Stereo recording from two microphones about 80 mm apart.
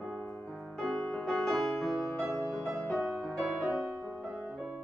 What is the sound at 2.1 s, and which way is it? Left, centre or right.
Music, right.